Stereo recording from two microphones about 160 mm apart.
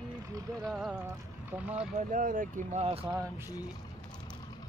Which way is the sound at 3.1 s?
15° right (ahead or behind).